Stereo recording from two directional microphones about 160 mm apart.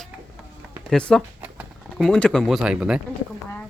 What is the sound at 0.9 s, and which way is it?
Speech, 5° left (ahead or behind).